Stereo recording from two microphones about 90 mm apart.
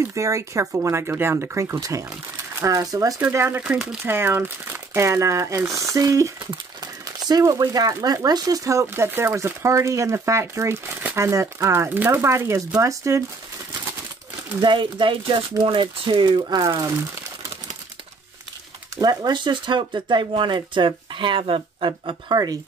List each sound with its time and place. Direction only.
0.0 s speech: 35° right (ahead or behind)
3.2 s speech: 25° right (ahead or behind)
3.6 s speech: 10° right (ahead or behind)
4.0 s speech: 25° right (ahead or behind)
14.6 s speech: 65° right (ahead or behind); by 16.9 s 45° right (ahead or behind)
18.9 s speech: 50° right (ahead or behind); by 22.1 s 75° right (ahead or behind)
22.3 s speech: 45° right (ahead or behind)